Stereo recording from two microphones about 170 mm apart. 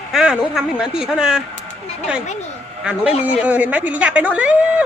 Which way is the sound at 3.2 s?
10° right (ahead or behind).